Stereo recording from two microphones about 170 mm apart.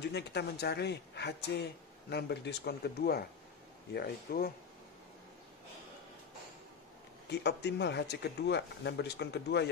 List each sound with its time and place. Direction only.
0.0 s speech: 80° left
7.2 s speech: 85° left